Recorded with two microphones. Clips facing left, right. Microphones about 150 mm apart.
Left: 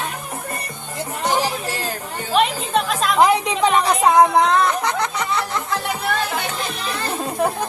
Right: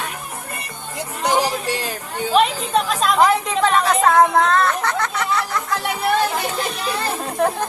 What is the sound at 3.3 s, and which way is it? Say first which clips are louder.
A woman's voice: left 1 dB; 15° left (ahead or behind).